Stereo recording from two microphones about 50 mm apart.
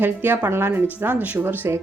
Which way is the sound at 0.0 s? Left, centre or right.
Right.